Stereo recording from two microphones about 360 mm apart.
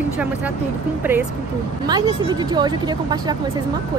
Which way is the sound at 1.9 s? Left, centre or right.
Centre.